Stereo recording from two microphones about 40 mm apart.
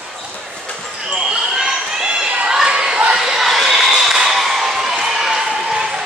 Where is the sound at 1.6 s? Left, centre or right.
Centre.